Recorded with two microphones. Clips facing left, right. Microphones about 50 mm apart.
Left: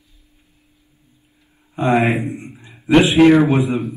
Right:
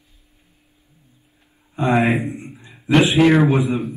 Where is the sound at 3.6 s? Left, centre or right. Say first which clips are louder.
Left 1 dB; left.